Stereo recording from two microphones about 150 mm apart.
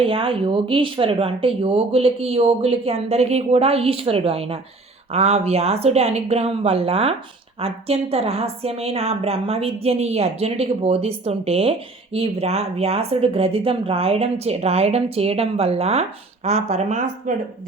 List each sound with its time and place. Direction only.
0.0 s speech: 35° right (ahead or behind); by 17.3 s 55° right (ahead or behind)